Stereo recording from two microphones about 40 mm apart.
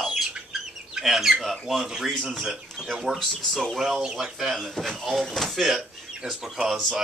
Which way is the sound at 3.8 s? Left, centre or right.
Centre.